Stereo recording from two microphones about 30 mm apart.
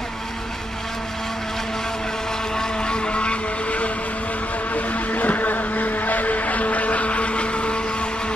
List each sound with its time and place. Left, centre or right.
2.5 s vehicle: left
4.7 s vehicle: left